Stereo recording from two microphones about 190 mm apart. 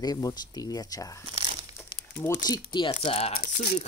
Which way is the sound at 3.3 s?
55° left (ahead or behind).